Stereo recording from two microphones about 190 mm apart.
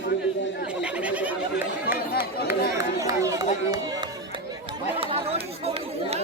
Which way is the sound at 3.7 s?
20° right (ahead or behind).